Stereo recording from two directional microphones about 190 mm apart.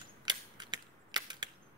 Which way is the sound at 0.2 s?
25° right (ahead or behind).